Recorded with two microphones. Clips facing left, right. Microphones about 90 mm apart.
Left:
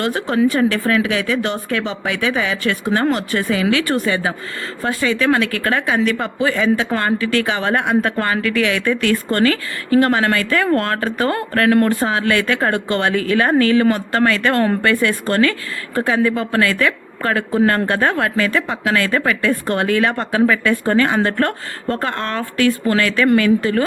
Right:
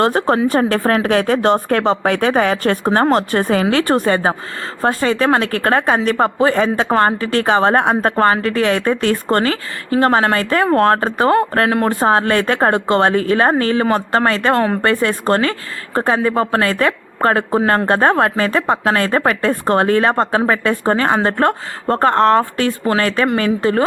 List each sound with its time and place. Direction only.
0.0 s a woman's voice: 40° right (ahead or behind)